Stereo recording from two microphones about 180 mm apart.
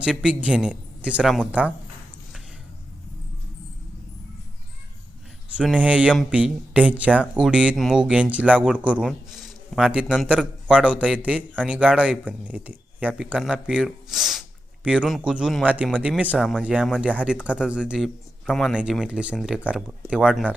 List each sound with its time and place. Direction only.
0.0 s speech: 5° right (ahead or behind)
5.5 s speech: 5° right (ahead or behind)